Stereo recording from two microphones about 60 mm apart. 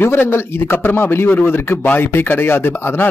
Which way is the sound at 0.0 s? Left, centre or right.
Left.